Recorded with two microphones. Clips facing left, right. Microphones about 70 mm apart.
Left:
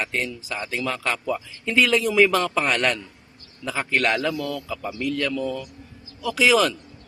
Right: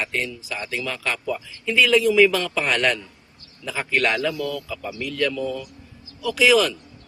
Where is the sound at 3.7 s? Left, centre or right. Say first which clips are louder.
Even; left.